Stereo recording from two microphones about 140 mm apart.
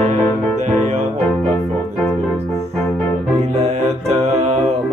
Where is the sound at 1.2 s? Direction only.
10° left (ahead or behind).